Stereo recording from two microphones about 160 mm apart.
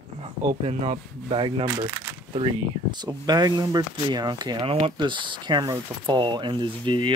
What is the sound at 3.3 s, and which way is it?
Speech, 25° right (ahead or behind).